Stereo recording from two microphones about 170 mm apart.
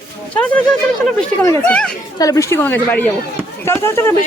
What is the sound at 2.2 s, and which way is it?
Speech, 20° left (ahead or behind).